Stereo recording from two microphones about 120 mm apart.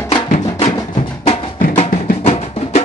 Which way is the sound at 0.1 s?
55° left (ahead or behind).